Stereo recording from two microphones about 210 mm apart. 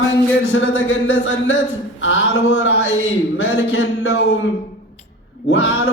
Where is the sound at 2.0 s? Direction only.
65° left (ahead or behind).